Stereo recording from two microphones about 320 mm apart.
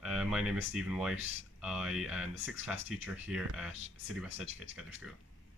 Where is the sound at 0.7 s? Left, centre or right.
Centre.